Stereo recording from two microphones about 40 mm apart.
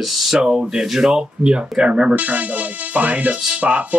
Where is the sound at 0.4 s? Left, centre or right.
Right.